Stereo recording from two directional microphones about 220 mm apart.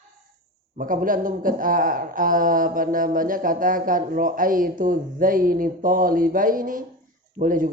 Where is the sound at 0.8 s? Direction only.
40° right (ahead or behind).